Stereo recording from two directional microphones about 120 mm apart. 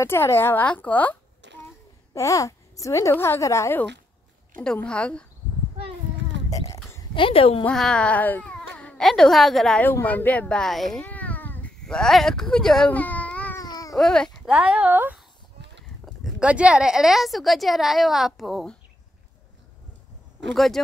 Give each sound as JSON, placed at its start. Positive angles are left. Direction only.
{"t": 0.0, "sound": "a woman's voice", "side_deg": 20}
{"t": 2.1, "sound": "a child's voice", "side_deg": 25}
{"t": 4.6, "sound": "a woman's voice", "side_deg": 10}
{"t": 6.5, "sound": "a sound", "side_deg": 25}
{"t": 7.2, "sound": "a woman's voice", "side_deg": 50}
{"t": 7.6, "sound": "speech", "side_deg": 5}
{"t": 9.8, "sound": "a child's voice", "side_deg": 15}
{"t": 11.8, "sound": "speech", "side_deg": 5}
{"t": 13.6, "sound": "babbling", "side_deg": 30}
{"t": 13.9, "sound": "baby cry", "side_deg": 5}
{"t": 14.5, "sound": "speech", "side_deg": -10}
{"t": 20.5, "sound": "speech", "side_deg": 0}